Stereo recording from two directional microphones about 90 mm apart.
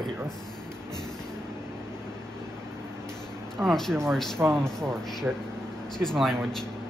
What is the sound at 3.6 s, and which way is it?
Speech, 5° left (ahead or behind).